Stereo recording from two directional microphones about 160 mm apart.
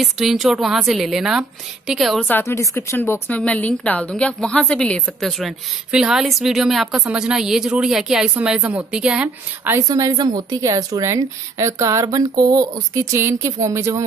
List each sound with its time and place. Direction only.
0.0 s a woman's voice: centre (ahead or behind)
2.2 s a woman's voice: 15° left (ahead or behind); by 9.8 s 5° right (ahead or behind)
9.8 s a woman's voice: 20° right (ahead or behind)